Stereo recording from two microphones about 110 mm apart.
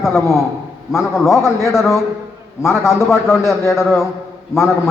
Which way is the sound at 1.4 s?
25° left (ahead or behind).